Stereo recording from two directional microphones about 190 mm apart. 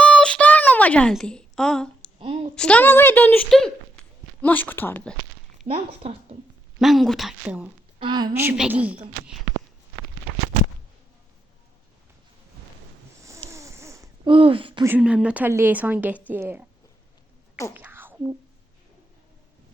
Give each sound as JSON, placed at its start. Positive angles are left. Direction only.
{"t": 0.0, "sound": "a sound", "side_deg": 5}
{"t": 2.1, "sound": "a sound", "side_deg": -30}
{"t": 2.6, "sound": "a woman's voice", "side_deg": 5}
{"t": 5.6, "sound": "speech", "side_deg": -30}
{"t": 6.7, "sound": "a woman's voice", "side_deg": 0}
{"t": 7.9, "sound": "speech", "side_deg": -25}
{"t": 13.5, "sound": "snoring", "side_deg": -15}
{"t": 14.3, "sound": "speech", "side_deg": -25}
{"t": 14.8, "sound": "speech", "side_deg": -10}
{"t": 17.7, "sound": "whispering", "side_deg": -10}